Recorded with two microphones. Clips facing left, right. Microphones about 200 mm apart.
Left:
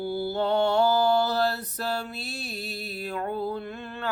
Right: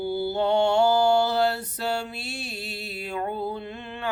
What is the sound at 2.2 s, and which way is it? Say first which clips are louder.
Music: even; 25° right (ahead or behind).